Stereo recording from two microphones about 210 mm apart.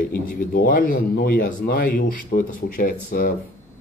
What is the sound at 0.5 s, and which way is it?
Speech, 45° left (ahead or behind).